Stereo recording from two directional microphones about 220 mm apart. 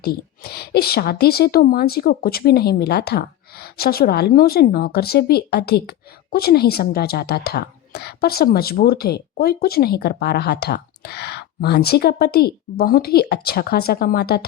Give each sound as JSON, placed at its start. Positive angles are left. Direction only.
{"t": 0.0, "sound": "a woman's voice", "side_deg": 45}